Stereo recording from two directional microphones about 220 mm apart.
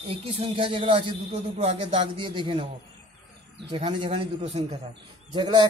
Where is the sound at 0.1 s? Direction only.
25° right (ahead or behind).